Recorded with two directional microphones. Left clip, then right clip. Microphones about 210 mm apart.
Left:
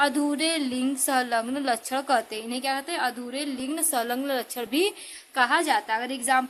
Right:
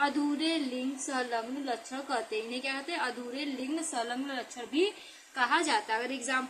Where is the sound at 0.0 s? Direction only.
60° left (ahead or behind).